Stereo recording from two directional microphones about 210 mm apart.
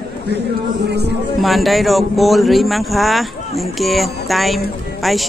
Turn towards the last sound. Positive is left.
turn(degrees=0)  # may be behind; listen again after turning